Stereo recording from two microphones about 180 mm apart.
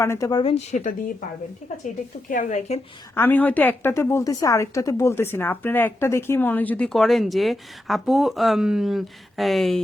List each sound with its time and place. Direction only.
0.0 s speech: 15° left (ahead or behind)
0.5 s speech: 40° left (ahead or behind)
2.3 s speech: 45° left (ahead or behind)
3.2 s a woman's voice: 10° left (ahead or behind)